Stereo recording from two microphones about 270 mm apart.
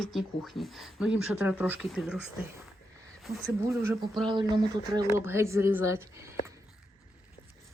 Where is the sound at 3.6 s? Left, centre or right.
Centre.